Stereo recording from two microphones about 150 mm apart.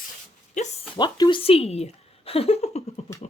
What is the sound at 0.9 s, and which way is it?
A woman's voice, 30° left (ahead or behind).